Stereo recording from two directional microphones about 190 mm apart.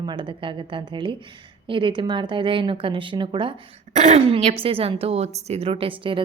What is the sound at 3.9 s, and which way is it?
A woman's voice, 40° right (ahead or behind).